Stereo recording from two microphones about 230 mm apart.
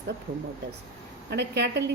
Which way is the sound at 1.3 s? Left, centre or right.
Right.